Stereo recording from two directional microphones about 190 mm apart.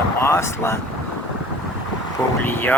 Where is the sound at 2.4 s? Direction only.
10° left (ahead or behind).